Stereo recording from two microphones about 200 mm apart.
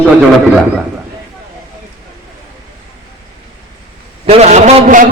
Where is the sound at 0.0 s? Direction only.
Centre (ahead or behind).